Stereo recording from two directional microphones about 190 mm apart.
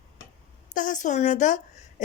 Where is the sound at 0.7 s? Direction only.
45° left (ahead or behind).